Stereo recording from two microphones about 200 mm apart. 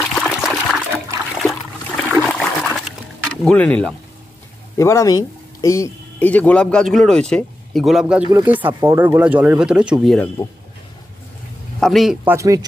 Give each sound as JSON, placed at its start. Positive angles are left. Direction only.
{"t": 0.0, "sound": "trickle", "side_deg": 0}
{"t": 1.4, "sound": "toilet flush", "side_deg": 0}
{"t": 2.2, "sound": "water", "side_deg": 0}
{"t": 3.4, "sound": "speech", "side_deg": 5}
{"t": 10.4, "sound": "speech", "side_deg": 20}
{"t": 11.8, "sound": "a man's voice", "side_deg": 0}
{"t": 12.4, "sound": "speech", "side_deg": -15}